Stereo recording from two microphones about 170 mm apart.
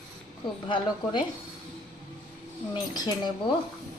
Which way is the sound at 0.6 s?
25° left (ahead or behind).